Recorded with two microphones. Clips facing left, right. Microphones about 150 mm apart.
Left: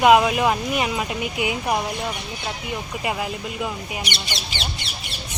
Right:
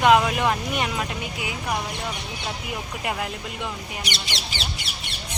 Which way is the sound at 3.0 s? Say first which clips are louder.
Left 2 dB; 5° left (ahead or behind).